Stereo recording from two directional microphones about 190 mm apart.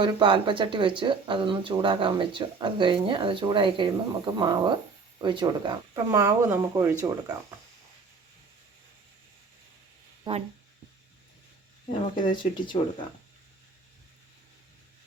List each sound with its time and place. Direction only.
0.0 s speech: 25° right (ahead or behind)
10.3 s speech: 25° right (ahead or behind)
11.9 s speech: 25° left (ahead or behind)